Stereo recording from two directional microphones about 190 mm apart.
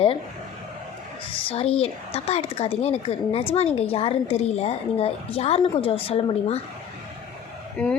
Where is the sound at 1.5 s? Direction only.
30° left (ahead or behind).